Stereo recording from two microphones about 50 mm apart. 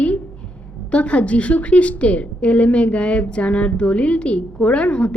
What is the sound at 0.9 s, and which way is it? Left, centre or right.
A woman's voice, left.